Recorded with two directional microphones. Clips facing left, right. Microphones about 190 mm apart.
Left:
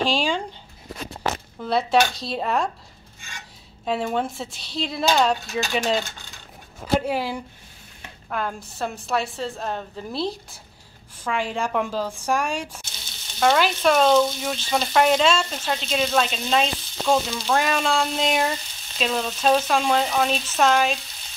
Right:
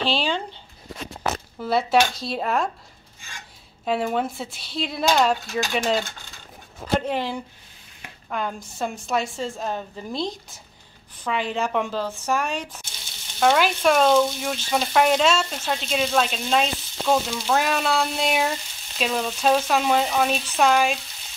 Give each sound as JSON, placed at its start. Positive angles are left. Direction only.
{"t": 0.1, "sound": "speech", "side_deg": 10}
{"t": 1.6, "sound": "speech", "side_deg": 0}
{"t": 3.8, "sound": "speech", "side_deg": 0}
{"t": 13.4, "sound": "speech", "side_deg": -5}